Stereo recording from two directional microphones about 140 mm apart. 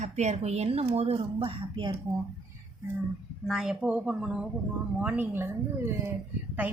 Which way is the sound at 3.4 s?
5° right (ahead or behind).